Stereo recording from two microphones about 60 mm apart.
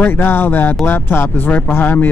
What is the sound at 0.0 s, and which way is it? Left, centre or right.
Speech, left.